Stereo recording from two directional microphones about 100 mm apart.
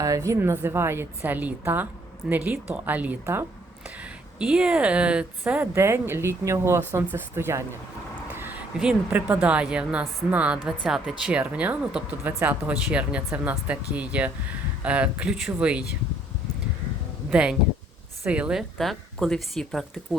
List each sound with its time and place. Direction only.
0.0 s speech: 35° right (ahead or behind); by 5.2 s 10° right (ahead or behind)
5.7 s speech: 25° right (ahead or behind)
8.4 s a sound: 20° right (ahead or behind)
8.8 s speech: 15° right (ahead or behind)
17.3 s speech: 10° right (ahead or behind)
18.8 s speech: 5° left (ahead or behind)